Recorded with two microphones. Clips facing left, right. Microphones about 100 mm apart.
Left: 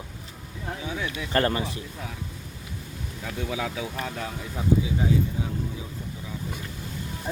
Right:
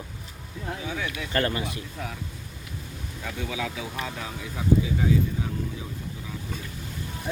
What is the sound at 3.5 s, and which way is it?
Speech, 45° left (ahead or behind).